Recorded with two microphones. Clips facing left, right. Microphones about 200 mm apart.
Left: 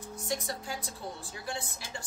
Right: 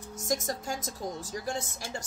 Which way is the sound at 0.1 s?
45° right (ahead or behind).